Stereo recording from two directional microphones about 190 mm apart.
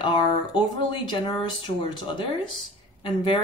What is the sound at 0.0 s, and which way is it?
Speech, 25° left (ahead or behind).